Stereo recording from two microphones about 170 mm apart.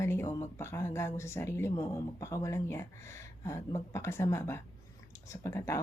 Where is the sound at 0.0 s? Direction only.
15° left (ahead or behind).